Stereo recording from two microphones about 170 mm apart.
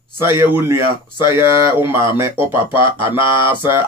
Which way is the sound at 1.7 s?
15° right (ahead or behind).